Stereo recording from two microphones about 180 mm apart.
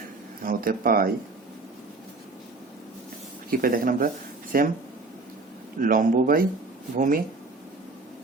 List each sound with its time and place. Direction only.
0.4 s speech: 50° right (ahead or behind)
3.5 s speech: 50° right (ahead or behind)
5.8 s speech: 50° right (ahead or behind)